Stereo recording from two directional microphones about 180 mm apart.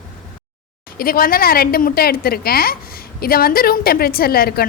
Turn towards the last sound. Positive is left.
turn(degrees=55)  # may be behind; listen again after turning